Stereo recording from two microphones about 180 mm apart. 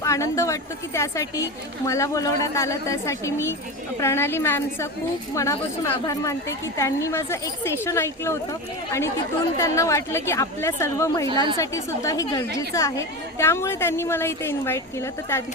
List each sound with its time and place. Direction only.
0.0 s a woman's voice: 15° left (ahead or behind)
9.6 s a woman's voice: 15° left (ahead or behind)